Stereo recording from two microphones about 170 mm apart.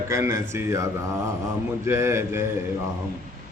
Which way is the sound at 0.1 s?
15° right (ahead or behind).